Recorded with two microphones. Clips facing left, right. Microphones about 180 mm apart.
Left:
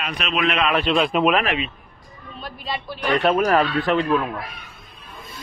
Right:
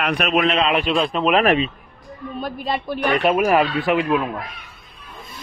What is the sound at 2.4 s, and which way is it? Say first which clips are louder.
Speech: right 5 dB; 50° right (ahead or behind).